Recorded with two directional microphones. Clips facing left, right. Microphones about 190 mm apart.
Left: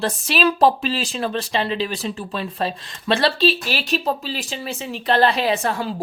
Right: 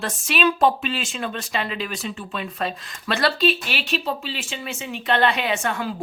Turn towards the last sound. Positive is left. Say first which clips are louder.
# left 3 dB
turn(degrees=35)  # may be behind; listen again after turning